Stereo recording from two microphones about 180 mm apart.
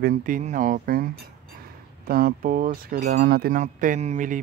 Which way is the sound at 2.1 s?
55° right (ahead or behind).